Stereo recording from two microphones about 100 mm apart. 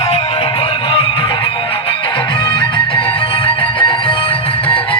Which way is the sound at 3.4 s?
60° left (ahead or behind).